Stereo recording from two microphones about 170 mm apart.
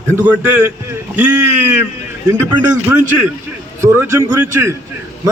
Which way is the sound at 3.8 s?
15° right (ahead or behind).